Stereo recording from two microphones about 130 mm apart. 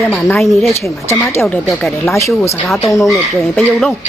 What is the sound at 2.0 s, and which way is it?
Speech, 20° left (ahead or behind).